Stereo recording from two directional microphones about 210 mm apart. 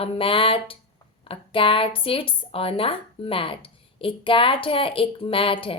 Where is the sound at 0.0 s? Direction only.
25° left (ahead or behind).